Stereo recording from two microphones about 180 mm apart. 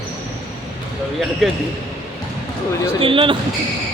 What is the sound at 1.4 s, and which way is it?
Speech, centre (ahead or behind).